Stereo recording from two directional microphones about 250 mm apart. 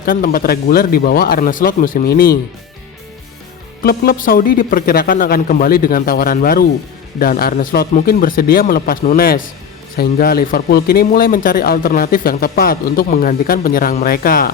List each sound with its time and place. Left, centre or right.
0.0 s speech: left
3.8 s speech: left